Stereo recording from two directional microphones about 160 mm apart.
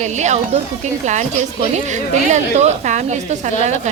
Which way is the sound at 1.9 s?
45° right (ahead or behind).